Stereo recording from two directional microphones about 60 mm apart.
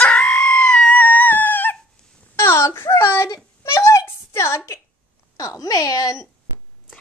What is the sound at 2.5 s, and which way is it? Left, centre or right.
Speech, left.